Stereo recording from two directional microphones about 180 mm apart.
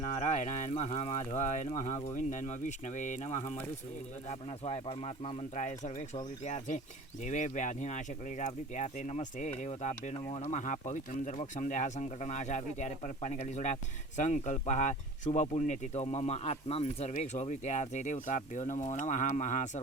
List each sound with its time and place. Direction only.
0.2 s speech: 45° left (ahead or behind)